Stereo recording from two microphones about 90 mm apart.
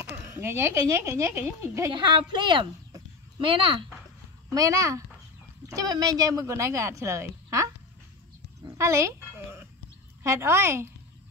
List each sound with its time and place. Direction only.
0.1 s speech: 25° right (ahead or behind)
1.9 s speech: 65° right (ahead or behind)
3.3 s speech: 75° right (ahead or behind)
4.6 s speech: 35° right (ahead or behind)
5.7 s speech: 45° right (ahead or behind)
8.6 s a sound: 35° right (ahead or behind)
10.2 s speech: 30° right (ahead or behind)